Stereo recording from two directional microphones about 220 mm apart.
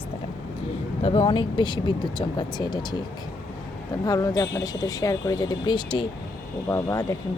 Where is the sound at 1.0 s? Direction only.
25° left (ahead or behind).